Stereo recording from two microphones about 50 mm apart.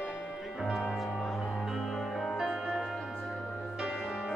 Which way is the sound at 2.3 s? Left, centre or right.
Centre.